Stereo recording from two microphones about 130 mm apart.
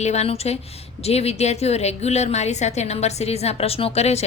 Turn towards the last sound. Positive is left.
turn(degrees=55)  # may be behind; listen again after turning